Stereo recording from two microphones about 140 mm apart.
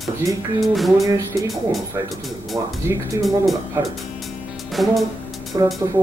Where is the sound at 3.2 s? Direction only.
Centre (ahead or behind).